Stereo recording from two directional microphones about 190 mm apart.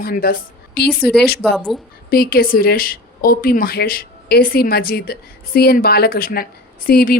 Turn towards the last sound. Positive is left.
turn(degrees=50)  # may be behind; listen again after turning